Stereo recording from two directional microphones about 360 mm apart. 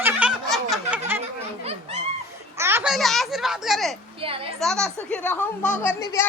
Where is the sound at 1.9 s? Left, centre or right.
Centre.